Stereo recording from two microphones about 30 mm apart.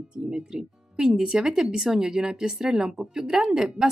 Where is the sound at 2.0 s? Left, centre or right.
Right.